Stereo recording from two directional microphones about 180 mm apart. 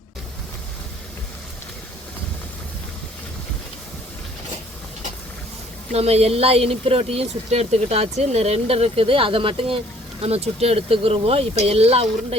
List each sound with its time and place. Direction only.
5.9 s speech: 35° right (ahead or behind)